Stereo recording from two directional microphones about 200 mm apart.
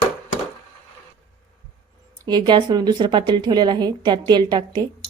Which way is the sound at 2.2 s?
20° right (ahead or behind).